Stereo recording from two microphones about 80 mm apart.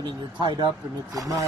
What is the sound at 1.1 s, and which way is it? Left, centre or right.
Speech, right.